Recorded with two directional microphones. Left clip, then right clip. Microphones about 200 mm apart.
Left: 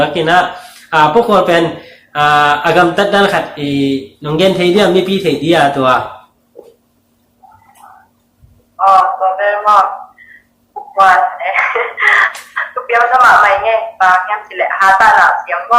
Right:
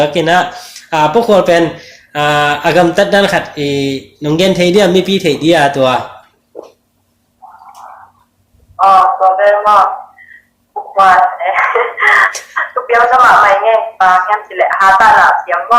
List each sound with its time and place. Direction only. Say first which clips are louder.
0.0 s speech: even; 45° right (ahead or behind)
8.7 s a sound: right 2 dB; 10° right (ahead or behind)
10.9 s speech: right 1 dB; 10° right (ahead or behind)